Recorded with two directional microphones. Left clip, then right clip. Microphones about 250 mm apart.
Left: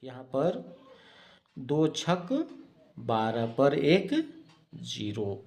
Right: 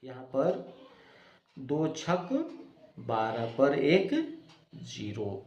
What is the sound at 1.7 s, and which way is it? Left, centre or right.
Speech, left.